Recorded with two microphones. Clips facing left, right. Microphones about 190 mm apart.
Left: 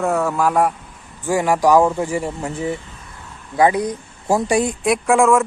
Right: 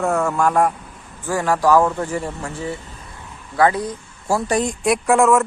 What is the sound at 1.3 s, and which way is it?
A woman's voice, 15° left (ahead or behind).